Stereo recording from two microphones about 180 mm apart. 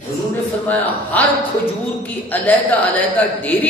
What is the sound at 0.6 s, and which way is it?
Speech, 10° left (ahead or behind).